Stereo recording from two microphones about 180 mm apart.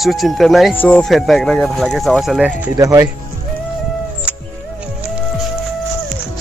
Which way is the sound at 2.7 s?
20° right (ahead or behind).